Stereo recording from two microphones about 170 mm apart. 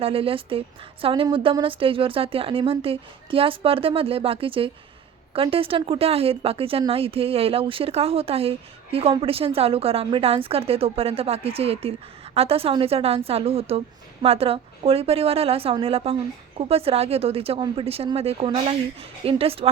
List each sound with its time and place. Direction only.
0.0 s a woman's voice: 35° right (ahead or behind)